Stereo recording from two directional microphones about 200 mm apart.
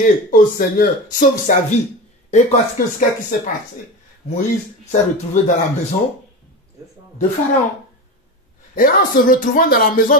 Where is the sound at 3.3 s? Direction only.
45° left (ahead or behind).